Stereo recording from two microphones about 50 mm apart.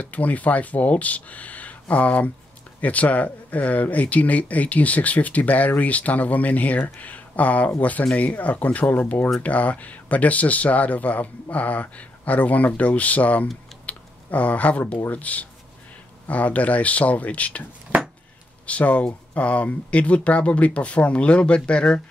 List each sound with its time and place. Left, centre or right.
0.0 s speech: left
18.7 s speech: left